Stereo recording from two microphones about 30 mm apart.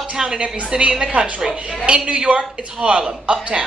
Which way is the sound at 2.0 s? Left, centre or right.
Right.